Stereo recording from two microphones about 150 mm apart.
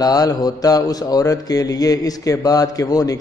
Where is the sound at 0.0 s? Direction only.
25° left (ahead or behind).